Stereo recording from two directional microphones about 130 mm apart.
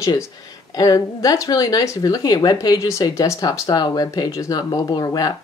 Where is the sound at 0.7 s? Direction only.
30° left (ahead or behind).